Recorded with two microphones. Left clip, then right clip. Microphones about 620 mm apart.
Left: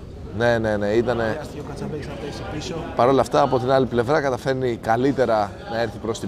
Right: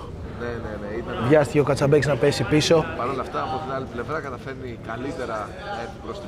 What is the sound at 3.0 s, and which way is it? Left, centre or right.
A man's voice, left.